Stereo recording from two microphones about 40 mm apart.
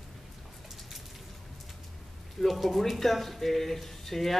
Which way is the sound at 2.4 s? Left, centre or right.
Centre.